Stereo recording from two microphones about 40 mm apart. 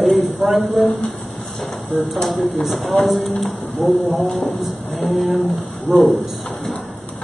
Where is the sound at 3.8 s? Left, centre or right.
Left.